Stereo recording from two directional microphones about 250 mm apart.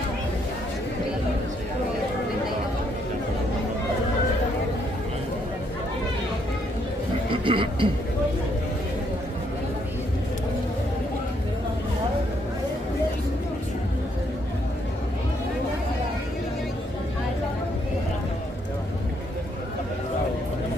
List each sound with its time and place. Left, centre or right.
7.2 s speech: centre